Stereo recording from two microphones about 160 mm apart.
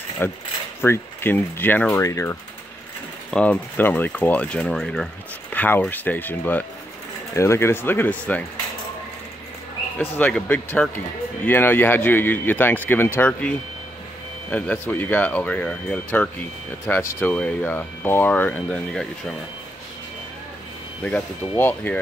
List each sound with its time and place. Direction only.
0.2 s speech: 15° left (ahead or behind)
3.3 s speech: 5° left (ahead or behind)
9.9 s speech: 10° left (ahead or behind)
21.0 s speech: 10° left (ahead or behind)